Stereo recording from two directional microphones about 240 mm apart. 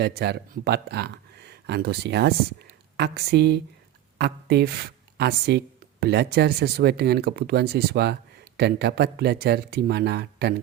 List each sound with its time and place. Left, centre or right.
0.0 s speech: right